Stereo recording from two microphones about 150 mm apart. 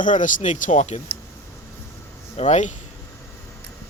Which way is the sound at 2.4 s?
50° left (ahead or behind).